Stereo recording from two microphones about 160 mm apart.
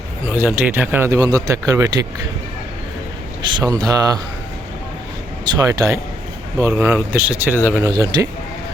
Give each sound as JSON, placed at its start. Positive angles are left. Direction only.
{"t": 0.3, "sound": "speech", "side_deg": -10}
{"t": 3.4, "sound": "speech", "side_deg": -25}
{"t": 5.5, "sound": "speech", "side_deg": -25}